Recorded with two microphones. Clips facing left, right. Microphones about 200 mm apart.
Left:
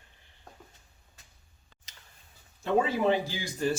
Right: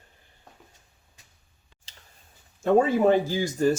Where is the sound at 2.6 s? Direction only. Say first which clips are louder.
Right 6 dB; 45° right (ahead or behind).